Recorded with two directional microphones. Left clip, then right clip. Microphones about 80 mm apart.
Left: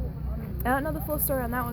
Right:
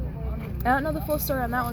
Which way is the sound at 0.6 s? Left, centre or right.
Left.